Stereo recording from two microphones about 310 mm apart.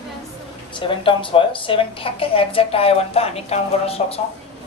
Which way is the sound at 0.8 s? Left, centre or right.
Centre.